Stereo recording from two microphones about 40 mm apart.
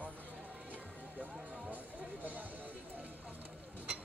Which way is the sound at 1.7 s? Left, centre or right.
Right.